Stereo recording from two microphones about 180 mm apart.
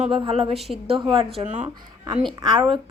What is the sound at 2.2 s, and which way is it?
Speech, 25° right (ahead or behind).